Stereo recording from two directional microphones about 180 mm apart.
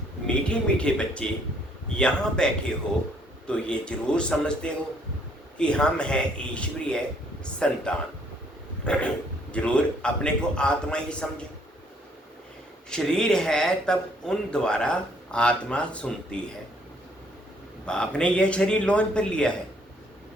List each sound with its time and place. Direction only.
0.3 s speech: 5° left (ahead or behind)
8.8 s a sound: 5° left (ahead or behind)
9.5 s speech: 5° left (ahead or behind)
12.9 s speech: 5° left (ahead or behind)
17.8 s speech: 5° left (ahead or behind)